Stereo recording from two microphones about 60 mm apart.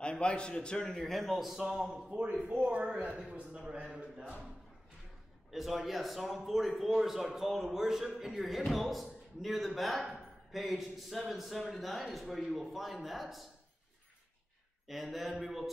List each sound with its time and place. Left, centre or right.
0.0 s a man's voice: centre
2.4 s speech: right
5.5 s a man's voice: centre
14.9 s a man's voice: centre